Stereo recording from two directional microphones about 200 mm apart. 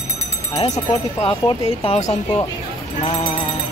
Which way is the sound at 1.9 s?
35° left (ahead or behind).